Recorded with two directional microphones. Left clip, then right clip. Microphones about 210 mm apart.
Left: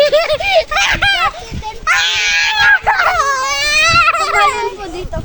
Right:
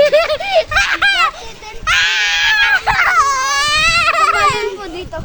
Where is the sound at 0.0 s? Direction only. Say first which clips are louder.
Even; 20° left (ahead or behind).